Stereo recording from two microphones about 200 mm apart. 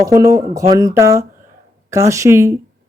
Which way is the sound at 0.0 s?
15° right (ahead or behind).